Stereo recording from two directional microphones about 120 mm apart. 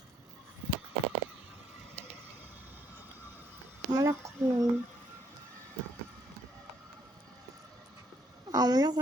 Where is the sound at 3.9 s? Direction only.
30° right (ahead or behind).